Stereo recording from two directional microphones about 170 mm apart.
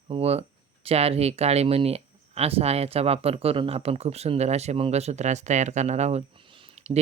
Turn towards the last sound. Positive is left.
turn(degrees=-40)  # may be behind; listen again after turning